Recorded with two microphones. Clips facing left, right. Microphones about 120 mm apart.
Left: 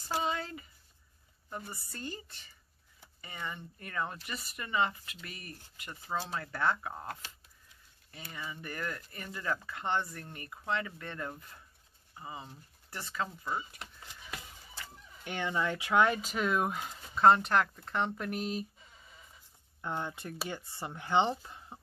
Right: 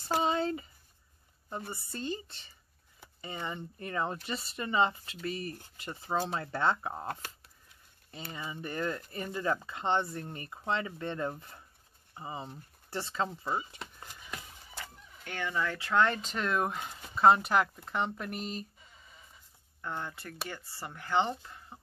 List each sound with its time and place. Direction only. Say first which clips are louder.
0.2 s a sound: right 5 dB; 25° right (ahead or behind)
1.5 s speech: right 3 dB; 25° right (ahead or behind)
7.1 s speech: right 4 dB; 50° right (ahead or behind)
8.3 s speech: right 3 dB; 25° right (ahead or behind)
15.2 s speech: left 1 dB; 20° left (ahead or behind); by 18.7 s 5° left (ahead or behind)
19.8 s speech: left 2 dB; 20° left (ahead or behind)